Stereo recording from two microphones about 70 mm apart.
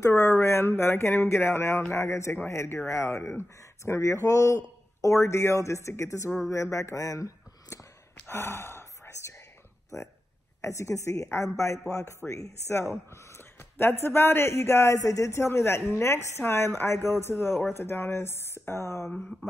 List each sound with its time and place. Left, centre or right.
0.1 s speech: left
8.3 s whispering: left
10.6 s speech: left
19.0 s mantra: centre